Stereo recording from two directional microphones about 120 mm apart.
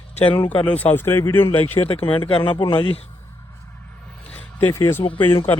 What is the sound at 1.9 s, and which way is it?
Speech, 50° left (ahead or behind).